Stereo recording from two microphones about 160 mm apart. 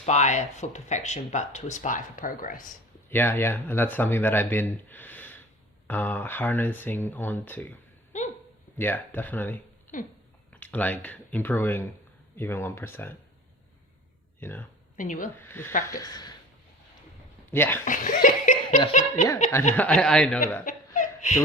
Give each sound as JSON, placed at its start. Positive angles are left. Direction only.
{"t": 0.0, "sound": "speech", "side_deg": 45}
{"t": 3.1, "sound": "speech", "side_deg": 15}
{"t": 4.9, "sound": "gasp", "side_deg": 10}
{"t": 5.9, "sound": "speech", "side_deg": 10}
{"t": 8.8, "sound": "speech", "side_deg": 15}
{"t": 14.4, "sound": "speech", "side_deg": 15}
{"t": 14.9, "sound": "a woman's voice", "side_deg": 55}
{"t": 15.4, "sound": "speech", "side_deg": 15}
{"t": 16.0, "sound": "a woman's voice", "side_deg": 25}
{"t": 17.5, "sound": "speech", "side_deg": 15}
{"t": 17.8, "sound": "laughter", "side_deg": 55}
{"t": 18.9, "sound": "speech", "side_deg": 50}
{"t": 19.7, "sound": "speech", "side_deg": 10}
{"t": 20.7, "sound": "laughter", "side_deg": 50}